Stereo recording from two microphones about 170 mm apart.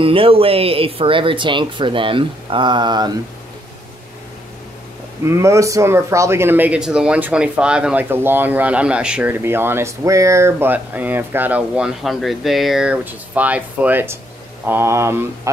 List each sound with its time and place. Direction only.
0.0 s speech: 30° right (ahead or behind)
5.2 s speech: 15° right (ahead or behind)